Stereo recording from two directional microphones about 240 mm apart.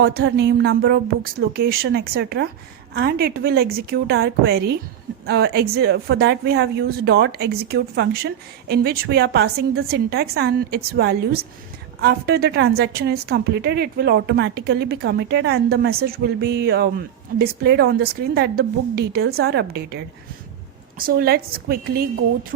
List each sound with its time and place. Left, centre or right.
0.0 s a woman's voice: right
21.0 s a woman's voice: right